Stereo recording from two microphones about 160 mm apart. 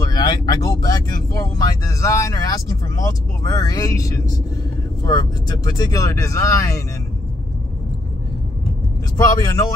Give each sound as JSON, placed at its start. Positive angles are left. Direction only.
{"t": 0.1, "sound": "speech", "side_deg": 25}
{"t": 9.1, "sound": "speech", "side_deg": 25}